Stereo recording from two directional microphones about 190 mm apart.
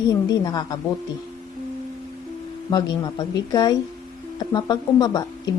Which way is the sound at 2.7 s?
20° left (ahead or behind).